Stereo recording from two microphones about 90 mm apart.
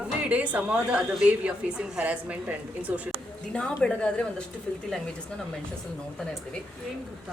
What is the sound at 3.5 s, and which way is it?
Speech, 10° left (ahead or behind).